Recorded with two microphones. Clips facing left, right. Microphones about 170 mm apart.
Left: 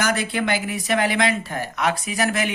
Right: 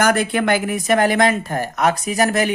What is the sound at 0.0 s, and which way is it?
Speech, 55° right (ahead or behind).